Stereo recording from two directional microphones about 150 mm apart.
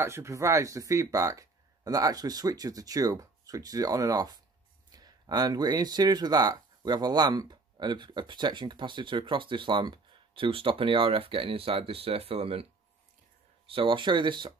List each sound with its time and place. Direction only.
0.0 s speech: 20° right (ahead or behind); by 12.6 s 40° right (ahead or behind)
13.7 s speech: 35° right (ahead or behind)